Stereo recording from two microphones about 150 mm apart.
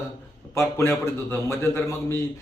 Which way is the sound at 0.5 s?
15° left (ahead or behind).